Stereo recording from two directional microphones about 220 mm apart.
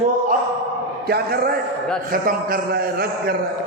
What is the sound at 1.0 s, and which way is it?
A man's voice, 45° right (ahead or behind).